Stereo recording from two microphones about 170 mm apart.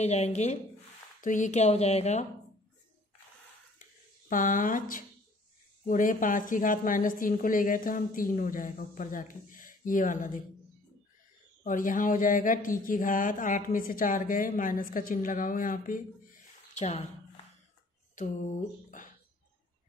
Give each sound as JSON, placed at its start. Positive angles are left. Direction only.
{"t": 0.0, "sound": "a woman's voice", "side_deg": 40}
{"t": 4.3, "sound": "speech", "side_deg": 50}
{"t": 11.6, "sound": "speech", "side_deg": 55}
{"t": 18.1, "sound": "a sound", "side_deg": 45}